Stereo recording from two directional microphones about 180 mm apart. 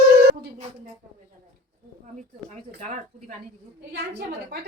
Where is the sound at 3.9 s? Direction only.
65° right (ahead or behind).